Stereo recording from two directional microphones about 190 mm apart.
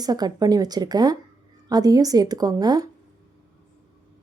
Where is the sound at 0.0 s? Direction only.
20° right (ahead or behind).